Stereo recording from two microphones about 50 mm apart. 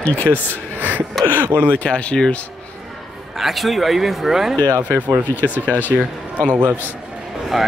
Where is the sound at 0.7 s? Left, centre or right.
Right.